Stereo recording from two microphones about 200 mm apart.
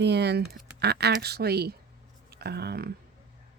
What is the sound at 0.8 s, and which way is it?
Speech, 55° right (ahead or behind).